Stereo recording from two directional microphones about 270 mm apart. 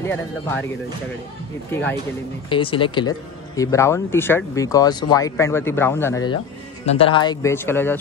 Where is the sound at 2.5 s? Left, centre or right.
Centre.